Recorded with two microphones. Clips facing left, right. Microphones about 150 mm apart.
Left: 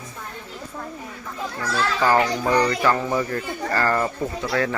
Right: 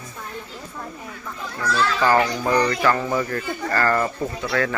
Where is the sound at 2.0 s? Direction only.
15° left (ahead or behind).